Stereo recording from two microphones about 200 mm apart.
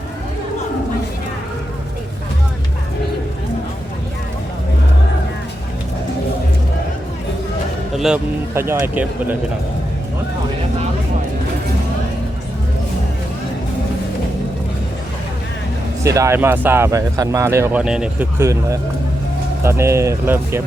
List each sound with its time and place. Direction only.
7.9 s speech: 5° right (ahead or behind)
16.0 s speech: 15° right (ahead or behind)